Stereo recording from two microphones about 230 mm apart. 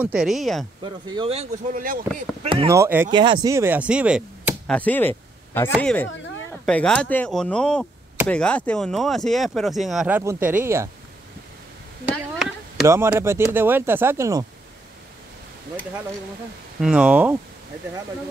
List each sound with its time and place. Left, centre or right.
0.0 s speech: centre
0.8 s speech: right
2.5 s speech: centre
12.4 s a sound: centre
12.8 s speech: centre
16.8 s speech: centre